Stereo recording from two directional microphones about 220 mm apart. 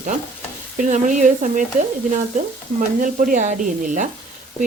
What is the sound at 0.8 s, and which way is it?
Speech, 35° right (ahead or behind).